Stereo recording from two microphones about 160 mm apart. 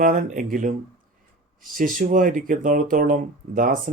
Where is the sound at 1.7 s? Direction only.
55° right (ahead or behind).